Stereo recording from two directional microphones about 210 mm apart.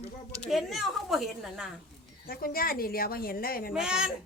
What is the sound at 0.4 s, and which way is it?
A woman's voice, centre (ahead or behind).